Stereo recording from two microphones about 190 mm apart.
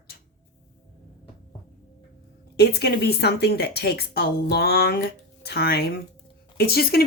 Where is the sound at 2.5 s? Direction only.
60° left (ahead or behind).